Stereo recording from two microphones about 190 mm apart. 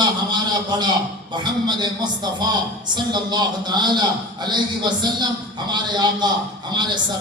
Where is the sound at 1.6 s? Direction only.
20° right (ahead or behind).